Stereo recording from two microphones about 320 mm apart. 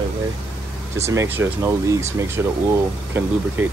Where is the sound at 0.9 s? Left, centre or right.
Centre.